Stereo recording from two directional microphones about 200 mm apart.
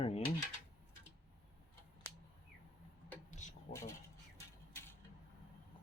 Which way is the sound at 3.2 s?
35° left (ahead or behind).